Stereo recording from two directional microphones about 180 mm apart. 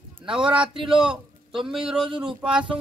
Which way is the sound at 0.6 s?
30° right (ahead or behind).